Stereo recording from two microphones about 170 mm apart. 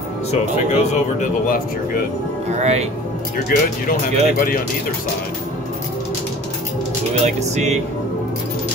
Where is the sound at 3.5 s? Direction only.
60° left (ahead or behind).